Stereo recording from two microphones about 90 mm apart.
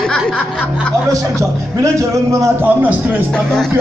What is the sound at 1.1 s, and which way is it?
A man's voice, 35° right (ahead or behind).